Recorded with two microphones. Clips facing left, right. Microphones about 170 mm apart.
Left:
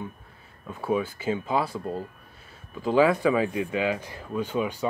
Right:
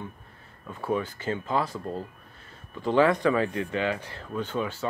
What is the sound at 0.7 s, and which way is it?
Speech, 10° left (ahead or behind).